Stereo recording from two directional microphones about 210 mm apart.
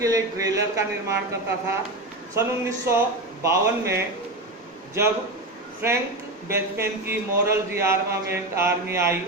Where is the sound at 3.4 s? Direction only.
15° right (ahead or behind).